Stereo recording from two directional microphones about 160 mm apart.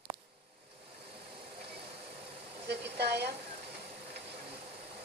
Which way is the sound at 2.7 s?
90° right.